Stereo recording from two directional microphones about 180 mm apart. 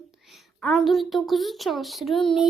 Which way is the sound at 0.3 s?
Centre (ahead or behind).